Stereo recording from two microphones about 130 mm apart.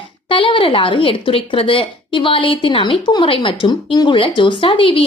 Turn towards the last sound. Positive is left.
turn(degrees=40)  # may be behind; listen again after turning